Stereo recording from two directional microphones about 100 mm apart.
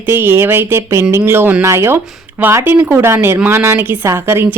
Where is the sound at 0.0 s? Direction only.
20° right (ahead or behind).